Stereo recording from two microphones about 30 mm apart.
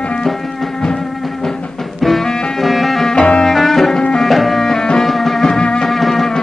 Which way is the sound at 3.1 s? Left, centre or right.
Left.